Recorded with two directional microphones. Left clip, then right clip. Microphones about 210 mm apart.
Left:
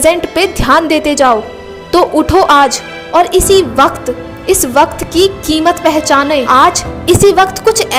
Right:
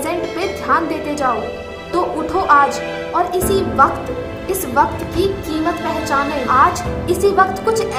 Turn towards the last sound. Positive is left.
turn(degrees=35)  # may be behind; listen again after turning